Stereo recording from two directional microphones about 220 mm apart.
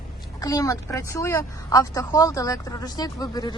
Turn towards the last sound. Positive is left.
turn(degrees=20)  # may be behind; listen again after turning